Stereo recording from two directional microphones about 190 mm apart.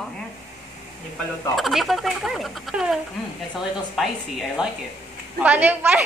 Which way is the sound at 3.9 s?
Centre (ahead or behind).